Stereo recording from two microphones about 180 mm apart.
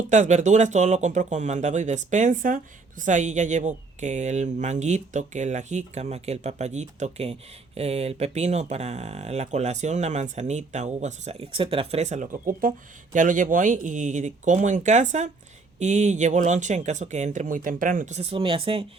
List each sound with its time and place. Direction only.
0.1 s speech: 40° right (ahead or behind)